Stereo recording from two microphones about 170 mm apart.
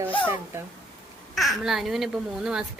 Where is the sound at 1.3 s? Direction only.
Centre (ahead or behind).